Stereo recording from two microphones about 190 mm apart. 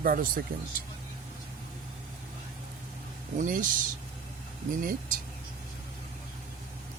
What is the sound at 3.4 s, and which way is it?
Speech, 45° right (ahead or behind).